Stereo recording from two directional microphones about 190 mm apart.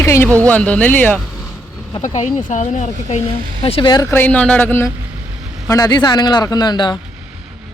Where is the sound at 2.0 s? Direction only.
40° left (ahead or behind); by 7.0 s 25° left (ahead or behind).